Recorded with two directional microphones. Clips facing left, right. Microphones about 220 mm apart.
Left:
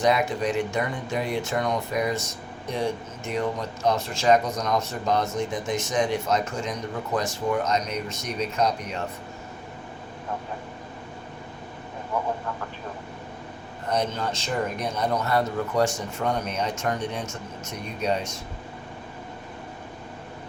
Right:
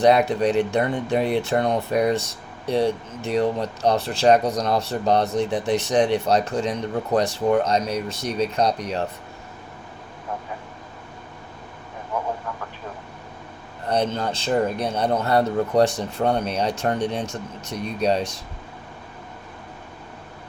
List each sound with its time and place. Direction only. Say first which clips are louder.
0.0 s a man's voice: right 6 dB; 35° right (ahead or behind)
13.9 s a man's voice: right 4 dB; 30° right (ahead or behind)